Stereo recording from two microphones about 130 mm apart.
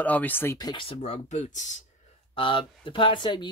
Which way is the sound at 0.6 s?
40° left (ahead or behind).